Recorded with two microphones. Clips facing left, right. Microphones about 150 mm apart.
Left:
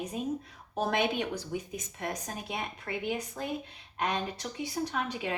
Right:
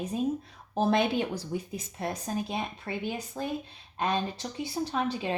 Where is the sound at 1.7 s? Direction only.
30° right (ahead or behind).